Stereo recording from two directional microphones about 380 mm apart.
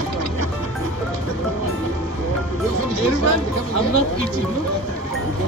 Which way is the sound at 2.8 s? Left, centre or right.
Right.